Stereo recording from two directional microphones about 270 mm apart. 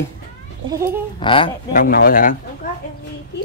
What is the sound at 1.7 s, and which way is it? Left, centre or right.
Speech, left.